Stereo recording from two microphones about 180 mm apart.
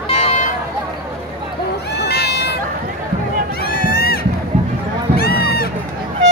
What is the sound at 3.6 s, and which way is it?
Crowd, 55° left (ahead or behind).